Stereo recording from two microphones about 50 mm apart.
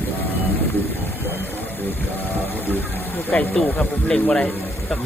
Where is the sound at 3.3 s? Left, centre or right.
Centre.